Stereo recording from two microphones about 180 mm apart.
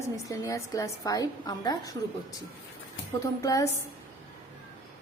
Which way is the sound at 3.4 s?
20° left (ahead or behind).